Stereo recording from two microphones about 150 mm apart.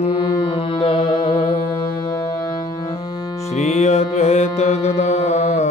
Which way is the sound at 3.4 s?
45° left (ahead or behind).